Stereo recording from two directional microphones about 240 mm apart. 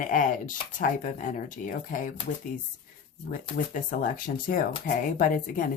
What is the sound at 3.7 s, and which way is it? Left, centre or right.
Speech, left.